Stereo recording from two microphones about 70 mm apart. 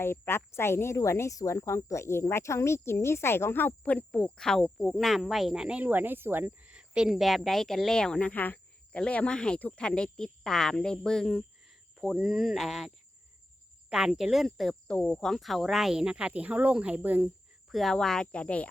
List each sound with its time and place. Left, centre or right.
0.0 s speech: left
3.9 s speech: centre
4.4 s speech: centre
5.8 s speech: right
6.7 s cricket: centre
7.1 s speech: centre
11.6 s cricket: centre
12.2 s speech: centre
13.9 s speech: centre; by 17.2 s right
17.7 s speech: centre